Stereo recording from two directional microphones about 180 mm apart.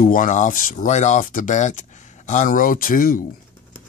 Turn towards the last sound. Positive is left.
turn(degrees=50)  # may be behind; listen again after turning